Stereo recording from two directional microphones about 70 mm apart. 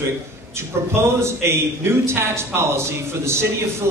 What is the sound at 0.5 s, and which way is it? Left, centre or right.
A man's voice, right.